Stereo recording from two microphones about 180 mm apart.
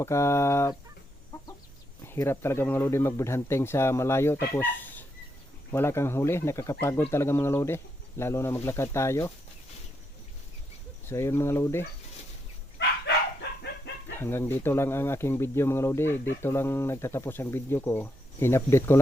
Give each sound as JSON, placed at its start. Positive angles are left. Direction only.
{"t": 0.0, "sound": "speech", "side_deg": 15}
{"t": 2.0, "sound": "speech", "side_deg": 15}
{"t": 11.1, "sound": "speech", "side_deg": 15}
{"t": 14.2, "sound": "speech", "side_deg": 10}